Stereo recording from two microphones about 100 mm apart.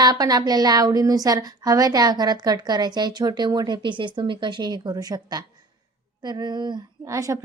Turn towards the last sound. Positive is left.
turn(degrees=-35)  # may be behind; listen again after turning